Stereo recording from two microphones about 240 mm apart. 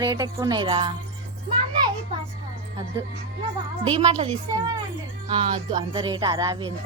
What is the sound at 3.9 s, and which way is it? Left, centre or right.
Speech, right.